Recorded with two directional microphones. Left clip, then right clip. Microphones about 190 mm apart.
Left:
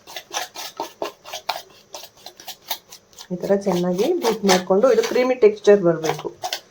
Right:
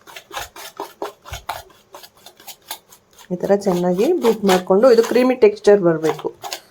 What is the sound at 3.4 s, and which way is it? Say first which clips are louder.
Speech: right 3 dB; 25° right (ahead or behind).